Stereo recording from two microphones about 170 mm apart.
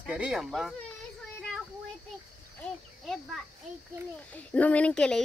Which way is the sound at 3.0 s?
Centre (ahead or behind).